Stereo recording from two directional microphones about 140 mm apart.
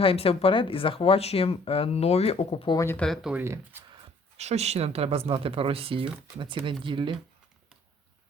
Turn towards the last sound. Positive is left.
turn(degrees=-35)  # may be behind; listen again after turning